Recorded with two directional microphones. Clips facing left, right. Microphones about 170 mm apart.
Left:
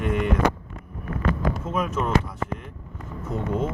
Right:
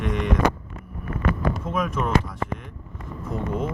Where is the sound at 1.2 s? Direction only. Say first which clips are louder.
Even; 30° left (ahead or behind).